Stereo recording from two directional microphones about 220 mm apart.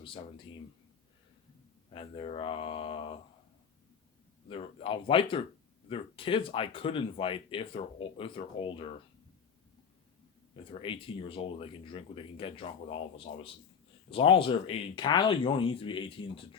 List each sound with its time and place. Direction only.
0.0 s speech: 25° left (ahead or behind)
1.9 s speech: 25° left (ahead or behind)
4.4 s speech: 25° left (ahead or behind)
10.7 s speech: 25° left (ahead or behind)